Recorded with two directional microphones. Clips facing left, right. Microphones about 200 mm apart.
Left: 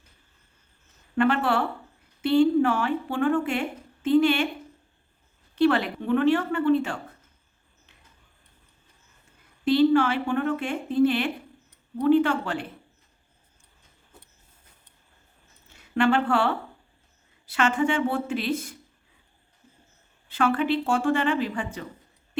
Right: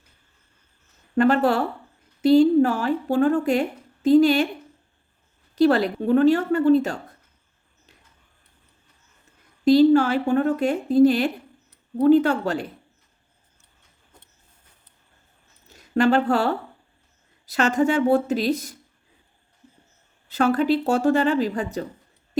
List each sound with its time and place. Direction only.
1.1 s a woman's voice: 40° right (ahead or behind)
5.5 s a woman's voice: 40° right (ahead or behind)
9.6 s a woman's voice: 40° right (ahead or behind)
15.6 s a woman's voice: 40° right (ahead or behind)
20.2 s a woman's voice: 40° right (ahead or behind)